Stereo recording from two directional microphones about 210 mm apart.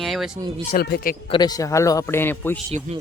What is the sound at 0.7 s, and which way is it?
Speech, 45° left (ahead or behind).